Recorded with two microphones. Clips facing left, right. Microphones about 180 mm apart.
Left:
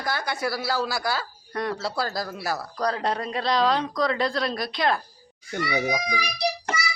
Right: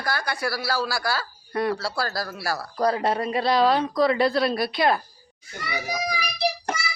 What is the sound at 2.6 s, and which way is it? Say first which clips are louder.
Speech: right 6 dB; 5° right (ahead or behind).